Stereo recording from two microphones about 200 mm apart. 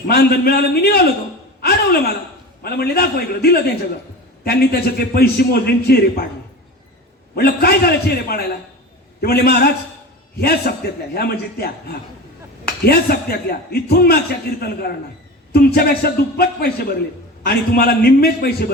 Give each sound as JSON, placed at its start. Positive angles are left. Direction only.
{"t": 0.1, "sound": "a man's voice", "side_deg": 50}
{"t": 7.3, "sound": "a man's voice", "side_deg": 50}